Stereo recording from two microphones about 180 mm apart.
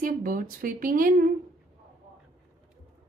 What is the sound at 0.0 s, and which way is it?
Speech, 50° right (ahead or behind).